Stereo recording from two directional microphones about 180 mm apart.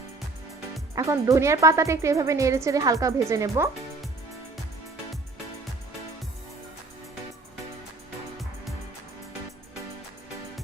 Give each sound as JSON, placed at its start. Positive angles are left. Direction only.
{"t": 0.9, "sound": "speech", "side_deg": -15}